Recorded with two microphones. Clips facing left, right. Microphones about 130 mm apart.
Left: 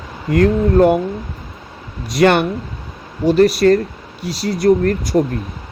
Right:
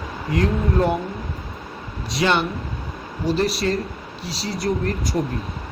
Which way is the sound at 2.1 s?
55° left (ahead or behind).